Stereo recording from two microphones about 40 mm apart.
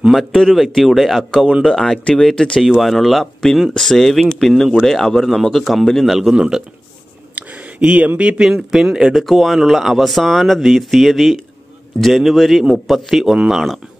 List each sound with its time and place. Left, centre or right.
0.1 s speech: centre
1.6 s speech: centre
2.8 s speech: centre
5.6 s speech: centre
6.3 s a man's voice: centre
7.3 s a sound: right
8.4 s speech: centre
9.2 s speech: centre